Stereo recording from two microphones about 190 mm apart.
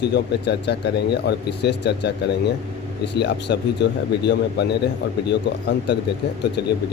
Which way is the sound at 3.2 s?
65° left (ahead or behind).